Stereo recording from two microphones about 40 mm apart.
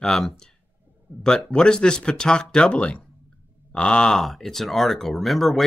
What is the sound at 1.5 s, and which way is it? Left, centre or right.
Speech, left.